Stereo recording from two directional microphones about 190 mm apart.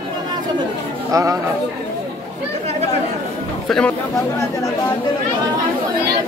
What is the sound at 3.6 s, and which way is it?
Speech, 5° left (ahead or behind).